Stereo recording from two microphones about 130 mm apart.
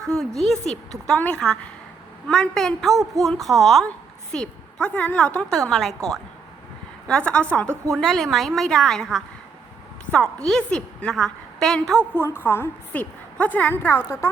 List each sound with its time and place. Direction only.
0.0 s a woman's voice: 5° left (ahead or behind)
7.1 s a woman's voice: 10° left (ahead or behind)
12.1 s a woman's voice: 15° left (ahead or behind)